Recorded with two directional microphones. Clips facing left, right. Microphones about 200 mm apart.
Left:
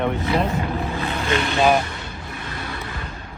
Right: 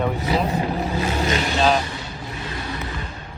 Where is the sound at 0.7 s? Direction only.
40° right (ahead or behind).